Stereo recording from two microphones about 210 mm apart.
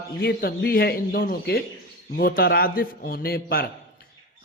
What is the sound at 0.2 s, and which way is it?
A man's voice, 45° left (ahead or behind).